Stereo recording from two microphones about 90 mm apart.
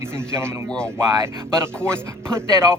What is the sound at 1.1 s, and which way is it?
Speech, 35° right (ahead or behind).